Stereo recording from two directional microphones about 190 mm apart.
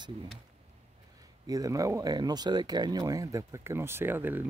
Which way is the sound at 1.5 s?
20° right (ahead or behind).